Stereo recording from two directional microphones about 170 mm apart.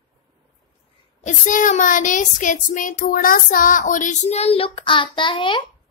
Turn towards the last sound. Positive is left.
turn(degrees=30)  # may be behind; listen again after turning